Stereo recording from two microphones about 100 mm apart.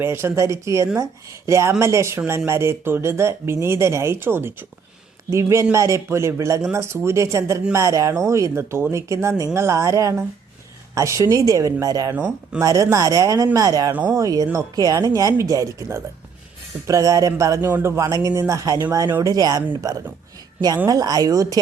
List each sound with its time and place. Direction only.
0.0 s speech: 25° right (ahead or behind)